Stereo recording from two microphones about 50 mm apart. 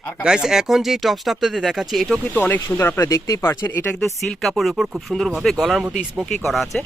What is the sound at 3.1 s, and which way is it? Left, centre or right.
Speech, left.